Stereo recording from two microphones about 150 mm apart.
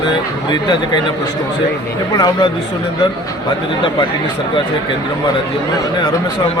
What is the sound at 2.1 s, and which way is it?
Speech, 25° left (ahead or behind).